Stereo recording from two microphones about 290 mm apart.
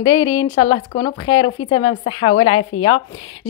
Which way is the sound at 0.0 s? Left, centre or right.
Centre.